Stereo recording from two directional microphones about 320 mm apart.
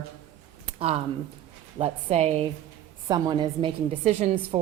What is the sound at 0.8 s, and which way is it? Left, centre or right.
A woman's voice, centre.